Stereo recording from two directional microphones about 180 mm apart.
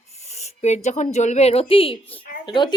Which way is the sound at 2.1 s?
25° left (ahead or behind).